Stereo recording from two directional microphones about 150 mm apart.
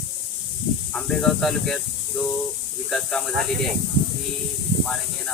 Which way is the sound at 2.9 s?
5° left (ahead or behind).